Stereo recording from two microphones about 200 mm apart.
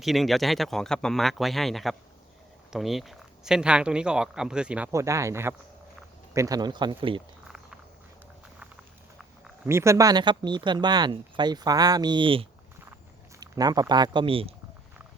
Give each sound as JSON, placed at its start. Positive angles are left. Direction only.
{"t": 0.0, "sound": "speech", "side_deg": 0}
{"t": 9.6, "sound": "speech", "side_deg": -15}